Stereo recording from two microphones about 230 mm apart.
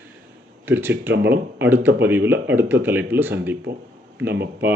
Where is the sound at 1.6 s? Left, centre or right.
Centre.